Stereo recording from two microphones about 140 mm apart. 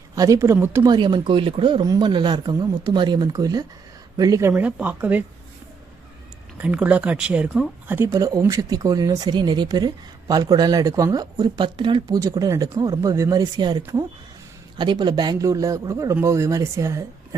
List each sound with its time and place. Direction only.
0.2 s speech: 20° right (ahead or behind)
0.9 s speech: 35° right (ahead or behind)
1.8 s speech: 30° right (ahead or behind); by 5.2 s 10° right (ahead or behind)
6.6 s speech: 10° right (ahead or behind)